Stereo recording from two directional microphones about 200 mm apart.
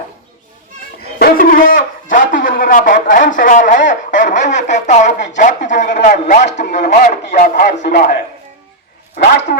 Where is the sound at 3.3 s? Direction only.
40° left (ahead or behind).